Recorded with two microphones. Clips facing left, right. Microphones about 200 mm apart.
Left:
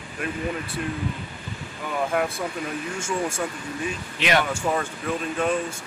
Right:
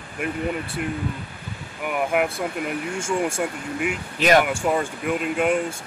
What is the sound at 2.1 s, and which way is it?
Speech, 10° right (ahead or behind).